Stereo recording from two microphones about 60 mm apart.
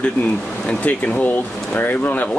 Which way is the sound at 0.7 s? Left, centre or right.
Left.